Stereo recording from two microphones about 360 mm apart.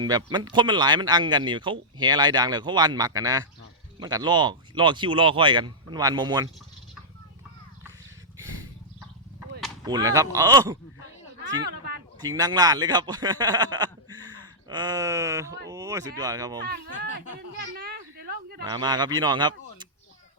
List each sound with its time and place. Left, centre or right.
0.0 s speech: centre
9.8 s speech: centre
12.2 s a man's voice: centre
16.6 s speech: right
17.7 s a sound: right
18.7 s speech: centre